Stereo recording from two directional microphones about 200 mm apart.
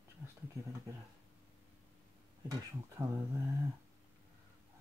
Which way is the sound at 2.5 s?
15° right (ahead or behind).